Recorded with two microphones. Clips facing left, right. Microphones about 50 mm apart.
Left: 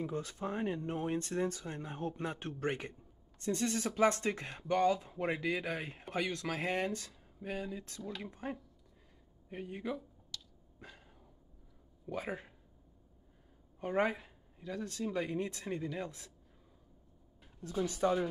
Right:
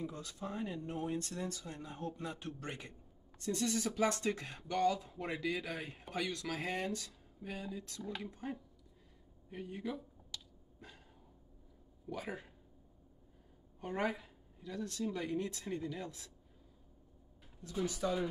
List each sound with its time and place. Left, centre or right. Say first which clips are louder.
0.0 s speech: left 5 dB; left
2.9 s speech: left 1 dB; left
7.1 s speech: left 4 dB; centre
10.3 s a sound: left 1 dB; centre
12.1 s speech: left 3 dB; left
13.7 s speech: left 4 dB; left
17.8 s speech: left 5 dB; left